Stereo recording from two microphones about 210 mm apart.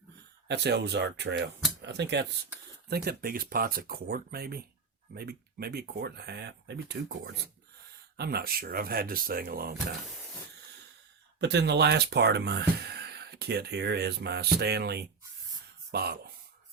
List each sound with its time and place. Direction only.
0.4 s speech: 55° right (ahead or behind)
11.3 s speech: 55° right (ahead or behind)